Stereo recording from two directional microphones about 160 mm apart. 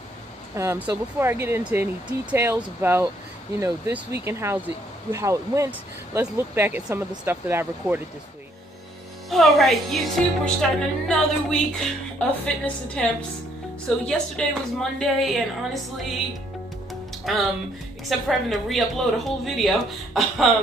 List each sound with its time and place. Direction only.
0.6 s speech: 15° right (ahead or behind)
9.3 s a woman's voice: centre (ahead or behind)
17.2 s a woman's voice: centre (ahead or behind)